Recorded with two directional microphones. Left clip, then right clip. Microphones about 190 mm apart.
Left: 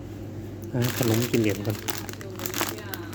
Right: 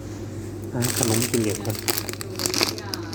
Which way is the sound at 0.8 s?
20° left (ahead or behind).